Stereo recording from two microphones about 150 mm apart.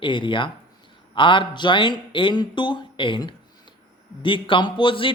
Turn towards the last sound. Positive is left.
turn(degrees=35)  # may be behind; listen again after turning